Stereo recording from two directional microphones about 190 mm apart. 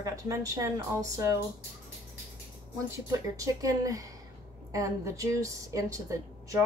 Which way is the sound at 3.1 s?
15° right (ahead or behind).